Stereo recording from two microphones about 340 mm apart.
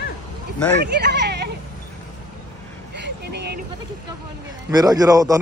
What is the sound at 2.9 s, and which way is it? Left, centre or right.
Vehicle, right.